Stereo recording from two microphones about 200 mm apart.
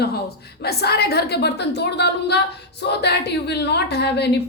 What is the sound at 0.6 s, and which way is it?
A woman's voice, 50° left (ahead or behind).